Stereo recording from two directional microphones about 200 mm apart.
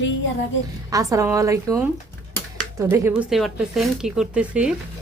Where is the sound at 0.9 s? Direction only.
15° right (ahead or behind).